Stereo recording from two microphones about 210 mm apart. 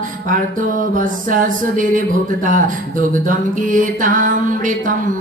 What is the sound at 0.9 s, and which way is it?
Music, 40° right (ahead or behind).